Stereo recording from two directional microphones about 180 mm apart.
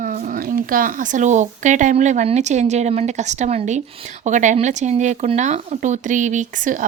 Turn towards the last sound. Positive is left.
turn(degrees=-45)  # may be behind; listen again after turning